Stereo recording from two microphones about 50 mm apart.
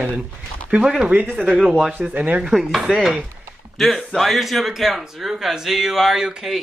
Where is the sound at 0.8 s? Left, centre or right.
Centre.